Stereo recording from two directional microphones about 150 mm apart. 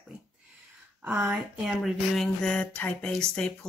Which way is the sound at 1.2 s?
Centre (ahead or behind).